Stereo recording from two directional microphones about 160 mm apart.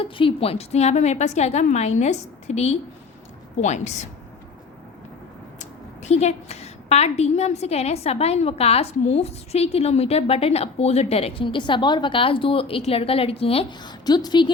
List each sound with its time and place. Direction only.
0.0 s a woman's voice: 35° left (ahead or behind)
5.5 s a woman's voice: 45° left (ahead or behind); by 14.5 s 25° left (ahead or behind)